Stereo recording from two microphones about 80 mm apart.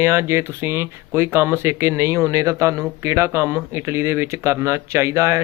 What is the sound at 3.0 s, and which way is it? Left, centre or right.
Speech, right.